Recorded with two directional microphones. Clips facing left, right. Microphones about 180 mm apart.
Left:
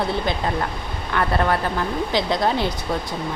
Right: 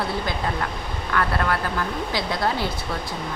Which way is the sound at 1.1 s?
25° left (ahead or behind).